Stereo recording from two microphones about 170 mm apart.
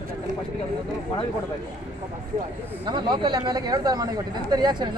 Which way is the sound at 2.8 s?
25° right (ahead or behind).